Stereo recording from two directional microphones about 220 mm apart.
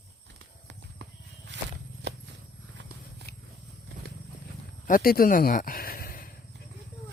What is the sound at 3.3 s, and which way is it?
Wild animals, 45° left (ahead or behind).